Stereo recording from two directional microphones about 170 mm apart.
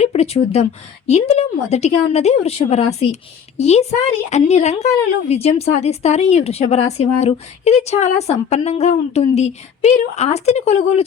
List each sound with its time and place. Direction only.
0.0 s speech: 35° left (ahead or behind)